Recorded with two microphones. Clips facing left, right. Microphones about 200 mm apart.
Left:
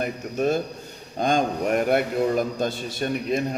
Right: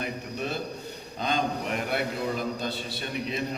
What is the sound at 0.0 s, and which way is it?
A man's voice, 45° left (ahead or behind).